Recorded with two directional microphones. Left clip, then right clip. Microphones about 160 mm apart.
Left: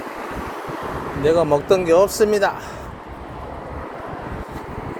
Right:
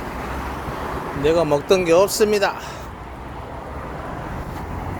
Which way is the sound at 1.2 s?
15° right (ahead or behind).